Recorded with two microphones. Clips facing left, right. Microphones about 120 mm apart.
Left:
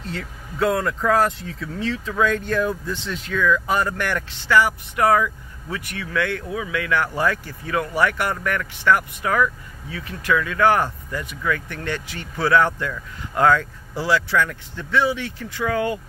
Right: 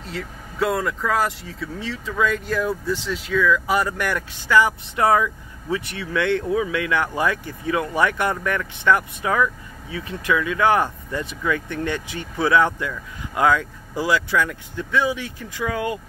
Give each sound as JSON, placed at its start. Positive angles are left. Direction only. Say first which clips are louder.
{"t": 0.0, "sound": "speech", "louder": "even", "side_deg": 0}